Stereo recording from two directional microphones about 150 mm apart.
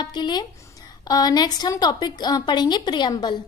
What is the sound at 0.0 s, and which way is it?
A woman's voice, 30° left (ahead or behind).